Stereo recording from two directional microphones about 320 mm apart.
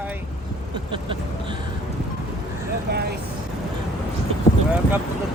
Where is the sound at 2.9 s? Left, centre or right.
Right.